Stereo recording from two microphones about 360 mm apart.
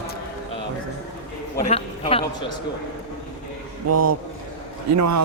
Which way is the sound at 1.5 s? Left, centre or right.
Centre.